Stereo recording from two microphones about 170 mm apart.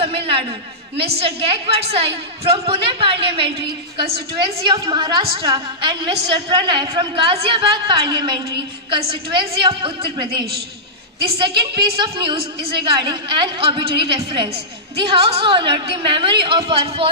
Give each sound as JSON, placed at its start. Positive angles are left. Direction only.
{"t": 0.0, "sound": "a woman's voice", "side_deg": -35}